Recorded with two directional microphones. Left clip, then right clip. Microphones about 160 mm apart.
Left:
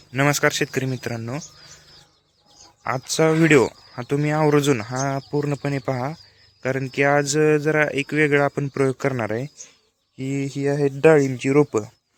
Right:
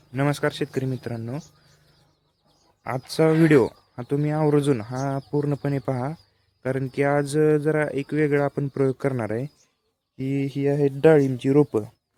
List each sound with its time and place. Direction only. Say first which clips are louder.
0.1 s speech: left 5 dB; centre (ahead or behind)
3.1 s speech: left 1 dB; 15° right (ahead or behind); by 5.2 s 5° left (ahead or behind)
5.5 s speech: left 1 dB; 10° right (ahead or behind)
5.9 s speech: left 3 dB; centre (ahead or behind)
10.2 s speech: even; 15° right (ahead or behind)